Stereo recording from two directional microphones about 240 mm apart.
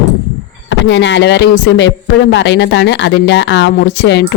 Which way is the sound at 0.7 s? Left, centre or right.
Left.